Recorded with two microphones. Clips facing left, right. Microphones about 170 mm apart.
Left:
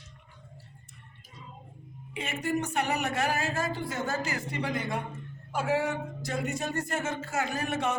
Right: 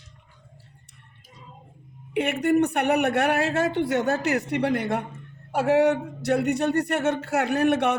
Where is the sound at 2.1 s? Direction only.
65° right (ahead or behind).